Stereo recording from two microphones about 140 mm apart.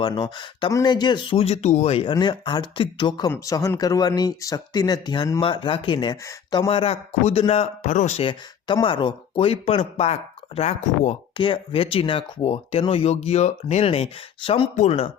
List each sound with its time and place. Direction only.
0.0 s speech: 35° left (ahead or behind); by 8.3 s 50° left (ahead or behind)
8.3 s speech: 35° left (ahead or behind); by 11.1 s 50° left (ahead or behind)
11.3 s speech: 40° left (ahead or behind)